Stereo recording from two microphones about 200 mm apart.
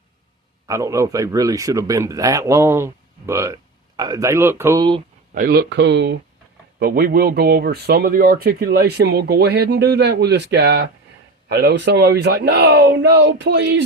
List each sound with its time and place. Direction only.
0.7 s speech: 15° right (ahead or behind)
5.3 s speech: 45° right (ahead or behind)
6.7 s speech: 45° right (ahead or behind)